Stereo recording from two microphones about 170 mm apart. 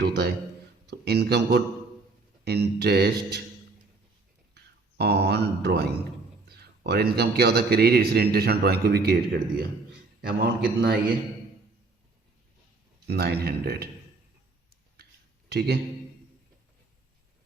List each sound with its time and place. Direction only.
0.9 s a man's voice: 75° right (ahead or behind)
4.5 s a man's voice: 70° right (ahead or behind)
13.1 s a man's voice: 70° right (ahead or behind)
15.4 s speech: 75° right (ahead or behind)